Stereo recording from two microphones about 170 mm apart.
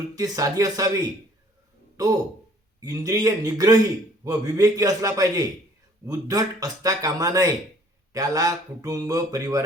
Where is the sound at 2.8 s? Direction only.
20° right (ahead or behind).